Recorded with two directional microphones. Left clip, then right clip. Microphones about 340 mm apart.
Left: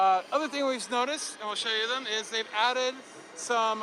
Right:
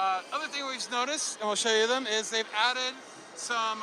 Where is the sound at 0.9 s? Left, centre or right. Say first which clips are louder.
Left 1 dB; centre.